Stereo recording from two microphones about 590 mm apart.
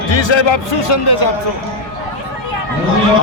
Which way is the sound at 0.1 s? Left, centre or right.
Left.